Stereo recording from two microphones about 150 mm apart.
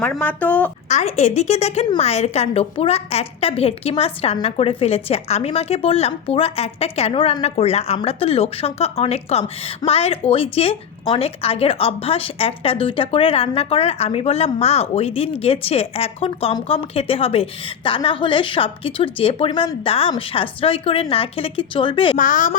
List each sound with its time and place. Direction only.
0.0 s speech: 10° left (ahead or behind)
0.9 s a woman's voice: 50° left (ahead or behind)
22.2 s speech: 60° left (ahead or behind)